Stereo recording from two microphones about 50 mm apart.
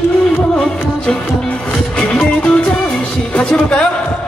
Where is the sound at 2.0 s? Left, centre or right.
Centre.